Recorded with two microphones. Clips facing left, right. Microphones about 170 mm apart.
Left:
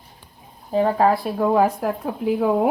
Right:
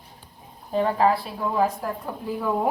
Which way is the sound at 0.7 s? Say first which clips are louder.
Left 3 dB; 35° left (ahead or behind).